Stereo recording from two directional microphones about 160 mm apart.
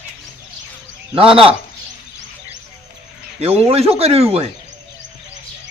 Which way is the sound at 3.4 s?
40° right (ahead or behind).